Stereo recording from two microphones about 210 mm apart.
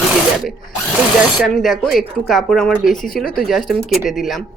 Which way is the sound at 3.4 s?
Centre (ahead or behind).